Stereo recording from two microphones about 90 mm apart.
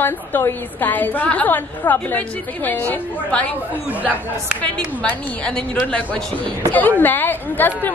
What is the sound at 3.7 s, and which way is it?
Speech, 15° right (ahead or behind).